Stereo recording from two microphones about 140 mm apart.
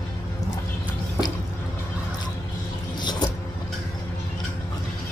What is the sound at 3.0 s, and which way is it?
Vehicle, 30° left (ahead or behind).